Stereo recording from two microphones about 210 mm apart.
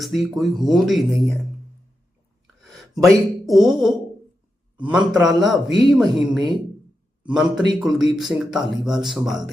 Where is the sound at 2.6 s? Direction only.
Centre (ahead or behind).